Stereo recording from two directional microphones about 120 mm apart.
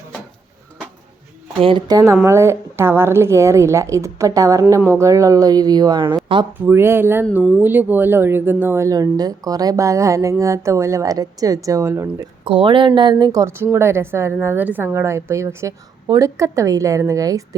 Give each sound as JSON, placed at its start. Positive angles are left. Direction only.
{"t": 1.5, "sound": "speech", "side_deg": -50}
{"t": 1.9, "sound": "speech", "side_deg": -30}
{"t": 6.5, "sound": "speech", "side_deg": -20}
{"t": 12.5, "sound": "speech", "side_deg": -45}
{"t": 13.4, "sound": "speech", "side_deg": -20}